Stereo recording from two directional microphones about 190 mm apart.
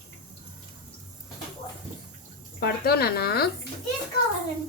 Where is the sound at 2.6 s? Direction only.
55° left (ahead or behind).